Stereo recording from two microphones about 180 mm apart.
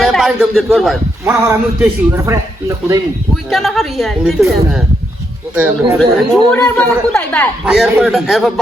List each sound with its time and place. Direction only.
0.0 s a man's voice: centre (ahead or behind)
1.2 s a man's voice: 15° right (ahead or behind)
3.5 s a woman's voice: centre (ahead or behind)
6.5 s a woman's voice: 5° left (ahead or behind)
7.6 s a woman's voice: 5° right (ahead or behind)